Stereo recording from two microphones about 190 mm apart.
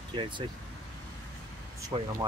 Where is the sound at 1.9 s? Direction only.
25° right (ahead or behind).